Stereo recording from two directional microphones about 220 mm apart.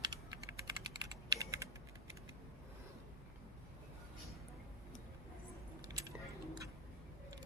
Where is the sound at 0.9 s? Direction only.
15° right (ahead or behind).